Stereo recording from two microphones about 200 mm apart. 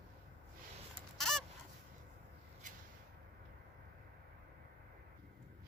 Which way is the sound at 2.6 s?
40° right (ahead or behind).